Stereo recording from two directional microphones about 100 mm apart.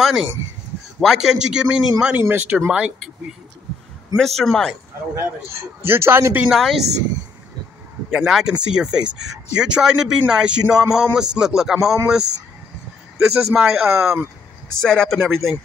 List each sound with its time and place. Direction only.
0.0 s speech: 5° right (ahead or behind)
2.2 s speech: 20° right (ahead or behind)
4.4 s speech: 5° left (ahead or behind)
5.1 s a man's voice: 25° right (ahead or behind)
6.4 s speech: 5° right (ahead or behind)
8.1 s speech: 5° right (ahead or behind)